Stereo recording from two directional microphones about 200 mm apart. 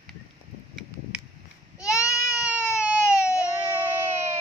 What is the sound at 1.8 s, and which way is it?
Baby cry, 15° left (ahead or behind).